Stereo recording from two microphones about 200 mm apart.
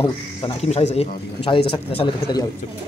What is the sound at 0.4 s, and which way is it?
A man's voice, 30° left (ahead or behind).